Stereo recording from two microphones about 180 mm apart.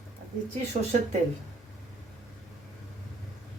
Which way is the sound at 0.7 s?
45° right (ahead or behind).